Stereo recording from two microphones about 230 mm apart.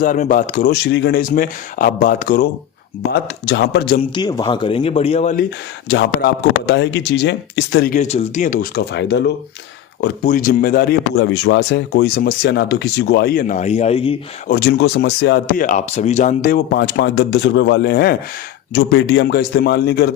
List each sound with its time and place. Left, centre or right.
0.0 s speech: left
0.9 s speech: left
3.4 s speech: left
4.1 s speech: centre
5.9 s speech: left
10.2 s speech: left
14.5 s speech: left
16.7 s speech: left